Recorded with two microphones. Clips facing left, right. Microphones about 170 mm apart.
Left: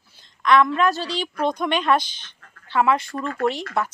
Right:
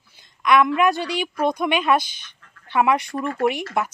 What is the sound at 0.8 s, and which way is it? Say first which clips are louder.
Speech: right 2 dB; 15° right (ahead or behind).